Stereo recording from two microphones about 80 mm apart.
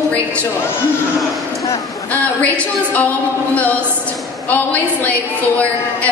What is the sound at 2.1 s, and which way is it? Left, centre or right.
A woman's voice, centre.